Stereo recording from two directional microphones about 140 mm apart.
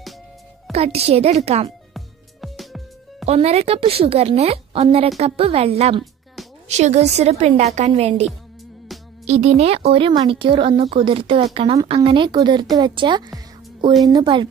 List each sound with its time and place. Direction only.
0.7 s a woman's voice: 45° right (ahead or behind)
2.0 s music: centre (ahead or behind)
3.3 s a woman's voice: 50° right (ahead or behind)
6.4 s music: centre (ahead or behind)
6.7 s a woman's voice: 50° right (ahead or behind)
9.2 s speech: 50° right (ahead or behind); by 14.5 s 35° right (ahead or behind)